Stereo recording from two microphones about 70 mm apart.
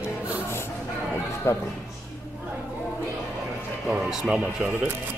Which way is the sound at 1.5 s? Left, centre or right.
Left.